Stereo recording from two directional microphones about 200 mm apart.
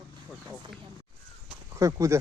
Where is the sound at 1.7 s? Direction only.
15° right (ahead or behind).